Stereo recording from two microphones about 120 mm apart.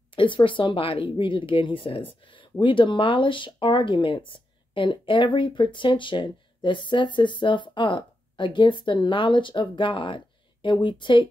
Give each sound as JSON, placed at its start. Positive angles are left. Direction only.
{"t": 0.1, "sound": "speech", "side_deg": 45}